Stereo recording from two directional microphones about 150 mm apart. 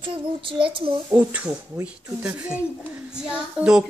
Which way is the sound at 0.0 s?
35° right (ahead or behind).